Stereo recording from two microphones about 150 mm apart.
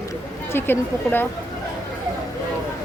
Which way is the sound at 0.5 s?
15° left (ahead or behind).